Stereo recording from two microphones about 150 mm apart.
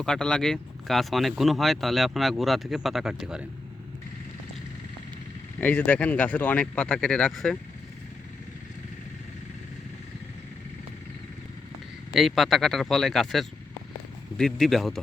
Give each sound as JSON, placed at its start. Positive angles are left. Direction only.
{"t": 0.0, "sound": "speech", "side_deg": 5}
{"t": 5.5, "sound": "speech", "side_deg": 10}
{"t": 12.1, "sound": "speech", "side_deg": 0}